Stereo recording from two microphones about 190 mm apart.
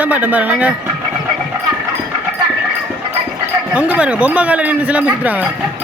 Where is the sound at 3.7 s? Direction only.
5° right (ahead or behind).